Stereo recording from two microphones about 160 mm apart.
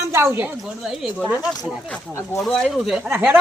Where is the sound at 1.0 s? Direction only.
Centre (ahead or behind).